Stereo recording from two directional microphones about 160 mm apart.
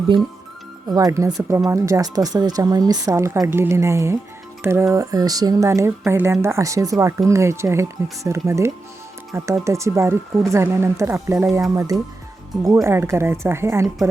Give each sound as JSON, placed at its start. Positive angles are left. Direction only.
{"t": 0.9, "sound": "speech", "side_deg": -25}